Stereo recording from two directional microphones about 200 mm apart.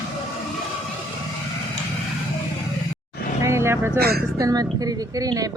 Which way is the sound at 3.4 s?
15° right (ahead or behind).